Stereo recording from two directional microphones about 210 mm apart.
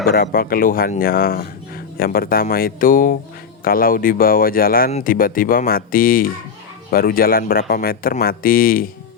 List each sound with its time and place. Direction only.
0.0 s speech: 45° left (ahead or behind)